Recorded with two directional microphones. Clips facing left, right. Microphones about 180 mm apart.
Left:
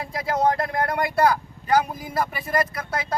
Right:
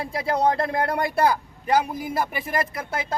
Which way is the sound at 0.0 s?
25° right (ahead or behind).